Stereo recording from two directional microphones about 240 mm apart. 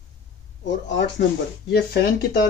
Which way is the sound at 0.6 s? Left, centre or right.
Left.